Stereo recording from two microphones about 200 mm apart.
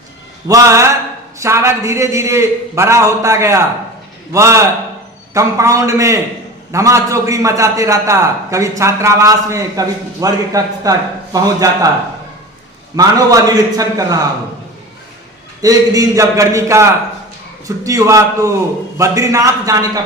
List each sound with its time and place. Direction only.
0.4 s a man's voice: 15° right (ahead or behind)
13.0 s a man's voice: 20° right (ahead or behind)
15.6 s a man's voice: 15° right (ahead or behind)